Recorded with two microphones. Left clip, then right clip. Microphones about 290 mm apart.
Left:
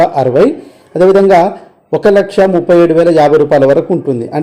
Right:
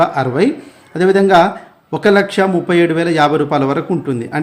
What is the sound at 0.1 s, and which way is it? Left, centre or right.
Speech, centre.